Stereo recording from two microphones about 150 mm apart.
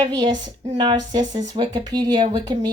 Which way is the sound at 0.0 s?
30° right (ahead or behind).